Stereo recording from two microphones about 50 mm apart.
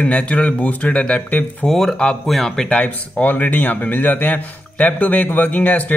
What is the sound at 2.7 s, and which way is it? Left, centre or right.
A man's voice, left.